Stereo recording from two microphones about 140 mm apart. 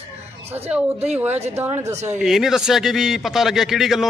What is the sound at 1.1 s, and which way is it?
Speech, 10° right (ahead or behind).